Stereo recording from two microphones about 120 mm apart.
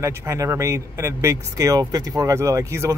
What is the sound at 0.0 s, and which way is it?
Speech, 20° right (ahead or behind).